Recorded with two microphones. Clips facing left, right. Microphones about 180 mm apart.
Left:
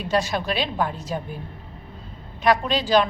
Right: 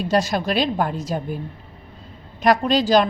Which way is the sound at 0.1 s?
40° right (ahead or behind).